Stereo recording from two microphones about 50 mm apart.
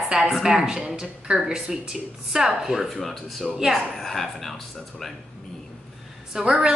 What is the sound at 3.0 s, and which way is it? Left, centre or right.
A man's voice, centre.